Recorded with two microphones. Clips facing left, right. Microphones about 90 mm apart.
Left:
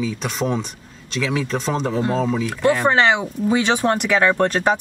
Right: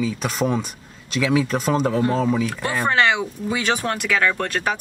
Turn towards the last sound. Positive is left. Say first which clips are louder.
# left 6 dB
turn(degrees=25)  # may be behind; listen again after turning